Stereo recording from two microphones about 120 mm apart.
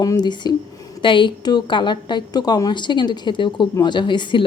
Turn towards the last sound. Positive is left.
turn(degrees=40)  # may be behind; listen again after turning